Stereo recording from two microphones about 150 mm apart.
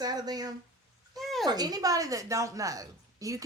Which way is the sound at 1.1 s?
Centre (ahead or behind).